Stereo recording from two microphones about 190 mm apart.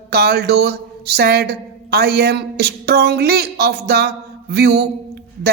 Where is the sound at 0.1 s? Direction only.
55° right (ahead or behind).